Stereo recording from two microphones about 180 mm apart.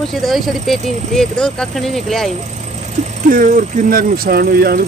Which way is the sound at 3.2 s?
50° right (ahead or behind).